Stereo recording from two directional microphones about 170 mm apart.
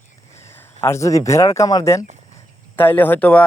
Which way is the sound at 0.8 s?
15° left (ahead or behind).